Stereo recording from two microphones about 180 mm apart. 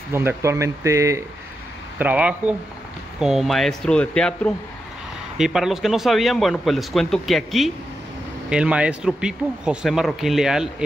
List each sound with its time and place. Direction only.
0.1 s speech: 15° right (ahead or behind)